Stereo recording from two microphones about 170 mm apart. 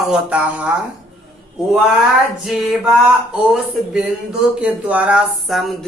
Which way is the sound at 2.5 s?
Centre (ahead or behind).